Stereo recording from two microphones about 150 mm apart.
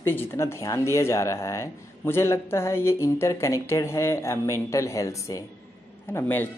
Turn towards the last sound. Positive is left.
turn(degrees=15)  # may be behind; listen again after turning